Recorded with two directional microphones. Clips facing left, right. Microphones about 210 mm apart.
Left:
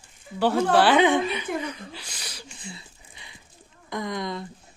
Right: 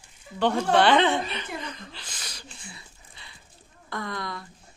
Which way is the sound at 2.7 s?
20° left (ahead or behind).